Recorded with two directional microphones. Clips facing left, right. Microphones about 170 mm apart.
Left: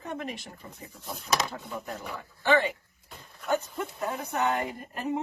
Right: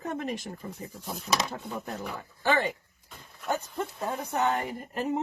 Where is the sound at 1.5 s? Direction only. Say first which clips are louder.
Right 1 dB; 45° right (ahead or behind).